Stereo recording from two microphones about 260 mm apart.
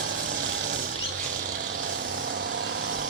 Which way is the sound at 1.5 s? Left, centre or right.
Right.